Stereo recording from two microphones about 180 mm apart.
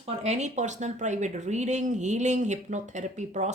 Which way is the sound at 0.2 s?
40° right (ahead or behind).